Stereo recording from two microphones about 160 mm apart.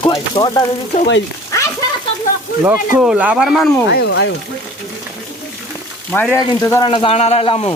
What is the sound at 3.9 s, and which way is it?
Speech, 90° left.